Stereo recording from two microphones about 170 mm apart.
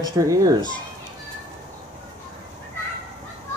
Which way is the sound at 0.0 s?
20° right (ahead or behind).